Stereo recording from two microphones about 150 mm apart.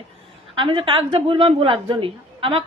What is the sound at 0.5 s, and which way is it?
A woman's voice, 35° right (ahead or behind).